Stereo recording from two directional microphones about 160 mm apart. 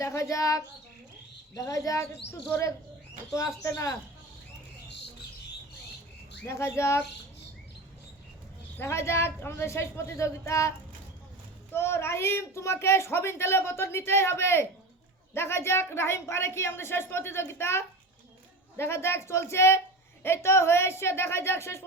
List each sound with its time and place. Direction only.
0.0 s speech: 20° left (ahead or behind)
6.4 s speech: 15° left (ahead or behind)
8.8 s speech: 15° left (ahead or behind)
11.7 s speech: 15° left (ahead or behind)